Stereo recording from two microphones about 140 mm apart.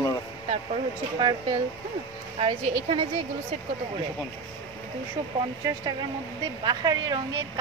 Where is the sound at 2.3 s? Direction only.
40° right (ahead or behind).